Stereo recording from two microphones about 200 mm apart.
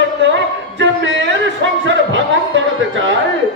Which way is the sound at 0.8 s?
65° right (ahead or behind).